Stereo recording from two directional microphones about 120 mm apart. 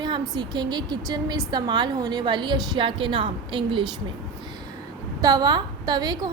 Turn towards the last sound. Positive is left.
turn(degrees=-35)  # may be behind; listen again after turning